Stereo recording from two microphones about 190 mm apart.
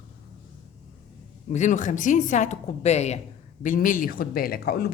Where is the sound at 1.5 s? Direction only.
40° left (ahead or behind).